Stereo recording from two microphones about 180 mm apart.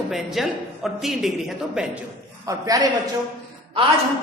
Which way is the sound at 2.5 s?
20° right (ahead or behind).